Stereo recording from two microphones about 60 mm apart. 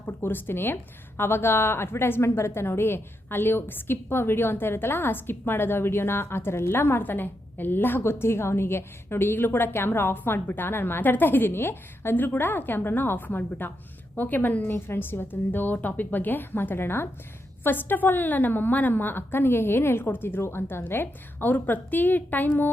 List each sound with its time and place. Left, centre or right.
0.2 s a woman's voice: left
14.7 s a woman's voice: left